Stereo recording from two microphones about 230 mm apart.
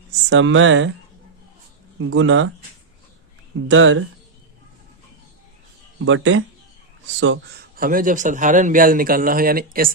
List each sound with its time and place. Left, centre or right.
0.3 s speech: right
2.0 s speech: right
3.7 s speech: right
6.1 s a man's voice: right